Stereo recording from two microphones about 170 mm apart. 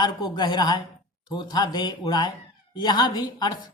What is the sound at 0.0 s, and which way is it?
Speech, 25° left (ahead or behind).